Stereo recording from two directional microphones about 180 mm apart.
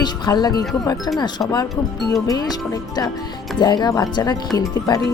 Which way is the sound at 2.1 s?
20° left (ahead or behind).